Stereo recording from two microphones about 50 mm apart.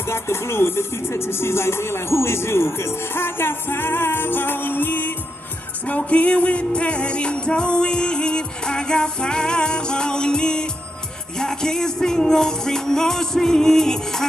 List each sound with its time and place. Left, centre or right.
0.0 s music: left
5.9 s music: left; by 14.2 s centre